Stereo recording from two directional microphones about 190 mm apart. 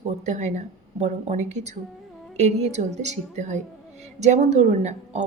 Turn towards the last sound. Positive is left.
turn(degrees=-35)  # may be behind; listen again after turning